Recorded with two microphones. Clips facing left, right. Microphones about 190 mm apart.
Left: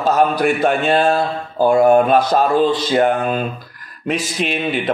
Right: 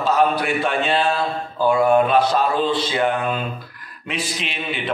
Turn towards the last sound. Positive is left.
turn(degrees=45)  # may be behind; listen again after turning